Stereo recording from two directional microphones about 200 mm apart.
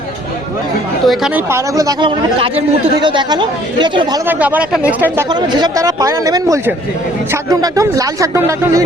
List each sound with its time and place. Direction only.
1.0 s speech: centre (ahead or behind)
1.5 s speech: 15° right (ahead or behind)
4.3 s speech: 10° right (ahead or behind)
5.3 s speech: 20° right (ahead or behind)